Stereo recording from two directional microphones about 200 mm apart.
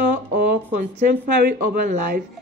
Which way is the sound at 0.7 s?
45° right (ahead or behind).